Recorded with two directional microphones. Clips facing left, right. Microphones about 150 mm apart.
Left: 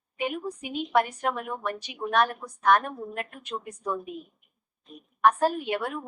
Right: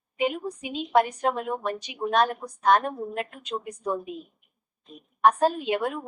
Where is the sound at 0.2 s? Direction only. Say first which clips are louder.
Right 3 dB; 20° right (ahead or behind).